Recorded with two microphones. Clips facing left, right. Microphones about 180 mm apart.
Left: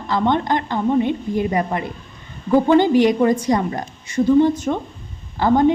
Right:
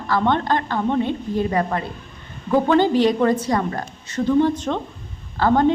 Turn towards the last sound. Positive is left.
turn(degrees=10)  # may be behind; listen again after turning